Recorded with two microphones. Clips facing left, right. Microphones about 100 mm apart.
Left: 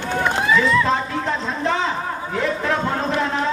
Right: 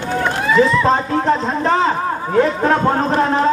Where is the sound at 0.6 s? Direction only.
40° right (ahead or behind).